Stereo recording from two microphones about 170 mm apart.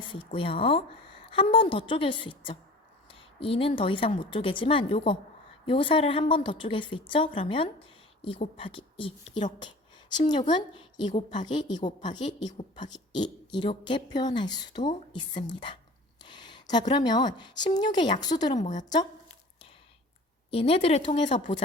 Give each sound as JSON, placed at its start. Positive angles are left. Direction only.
{"t": 0.3, "sound": "a woman's voice", "side_deg": 30}
{"t": 16.2, "sound": "a sound", "side_deg": 25}
{"t": 16.9, "sound": "speech", "side_deg": 25}
{"t": 18.6, "sound": "a woman's voice", "side_deg": 45}
{"t": 20.5, "sound": "a woman's voice", "side_deg": 35}